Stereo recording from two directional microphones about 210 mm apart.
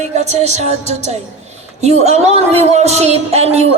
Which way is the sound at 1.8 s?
30° right (ahead or behind).